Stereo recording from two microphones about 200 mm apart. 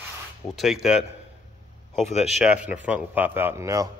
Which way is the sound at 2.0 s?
35° left (ahead or behind).